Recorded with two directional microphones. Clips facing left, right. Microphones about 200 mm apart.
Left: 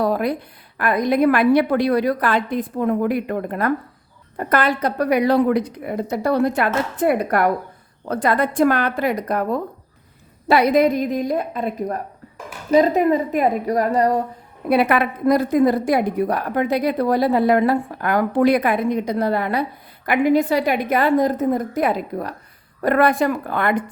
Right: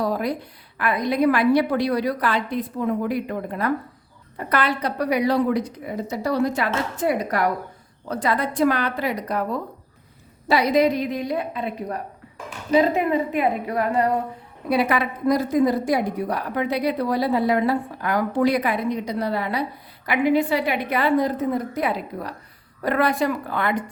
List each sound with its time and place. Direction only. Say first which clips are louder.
0.0 s speech: left 4 dB; 60° left (ahead or behind)
0.8 s a woman's voice: left 4 dB; 45° left (ahead or behind)
14.7 s a woman's voice: left 4 dB; 60° left (ahead or behind)